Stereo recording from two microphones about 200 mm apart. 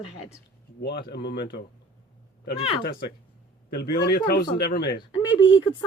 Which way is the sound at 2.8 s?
45° left (ahead or behind).